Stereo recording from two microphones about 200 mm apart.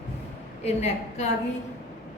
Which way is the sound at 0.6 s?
35° left (ahead or behind).